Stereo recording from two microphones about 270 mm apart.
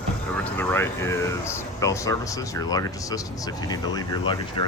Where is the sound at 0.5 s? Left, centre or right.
Centre.